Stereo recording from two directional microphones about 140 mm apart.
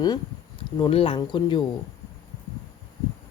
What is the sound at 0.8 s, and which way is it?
Speech, 40° left (ahead or behind).